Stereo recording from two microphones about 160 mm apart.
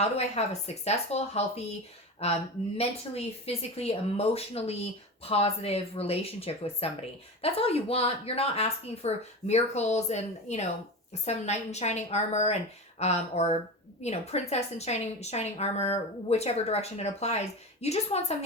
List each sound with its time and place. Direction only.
0.0 s a woman's voice: 40° left (ahead or behind)